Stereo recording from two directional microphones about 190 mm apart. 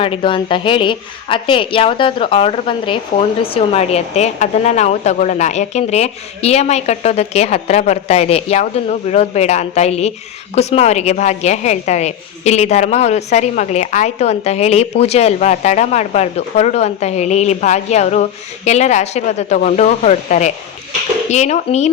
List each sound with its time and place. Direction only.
0.0 s a woman's voice: 30° left (ahead or behind)